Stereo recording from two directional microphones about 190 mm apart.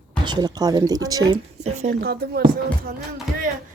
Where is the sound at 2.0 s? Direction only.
55° right (ahead or behind).